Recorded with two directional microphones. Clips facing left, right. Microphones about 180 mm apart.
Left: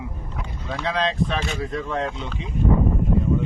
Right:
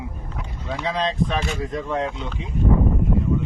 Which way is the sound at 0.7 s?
10° right (ahead or behind).